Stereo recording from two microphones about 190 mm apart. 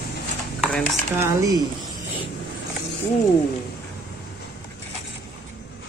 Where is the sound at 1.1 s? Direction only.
15° right (ahead or behind).